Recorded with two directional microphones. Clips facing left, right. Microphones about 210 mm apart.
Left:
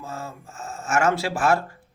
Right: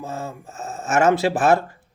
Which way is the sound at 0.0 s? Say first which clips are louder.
Right 4 dB; 20° right (ahead or behind).